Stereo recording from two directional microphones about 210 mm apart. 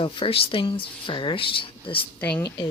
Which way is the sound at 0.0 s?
25° left (ahead or behind).